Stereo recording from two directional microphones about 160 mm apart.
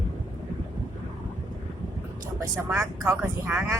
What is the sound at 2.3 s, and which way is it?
Speech, 20° right (ahead or behind).